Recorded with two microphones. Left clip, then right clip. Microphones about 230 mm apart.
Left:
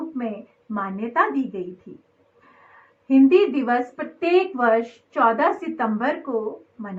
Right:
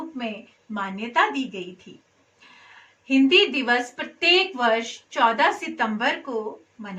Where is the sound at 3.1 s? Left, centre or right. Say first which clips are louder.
Left 2 dB; right.